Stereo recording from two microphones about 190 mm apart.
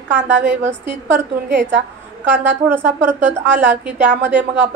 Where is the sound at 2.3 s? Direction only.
10° right (ahead or behind).